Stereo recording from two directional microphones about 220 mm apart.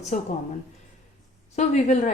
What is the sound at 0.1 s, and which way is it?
Speech, 35° left (ahead or behind).